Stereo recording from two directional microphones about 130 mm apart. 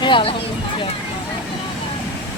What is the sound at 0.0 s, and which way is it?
Speech, 40° left (ahead or behind).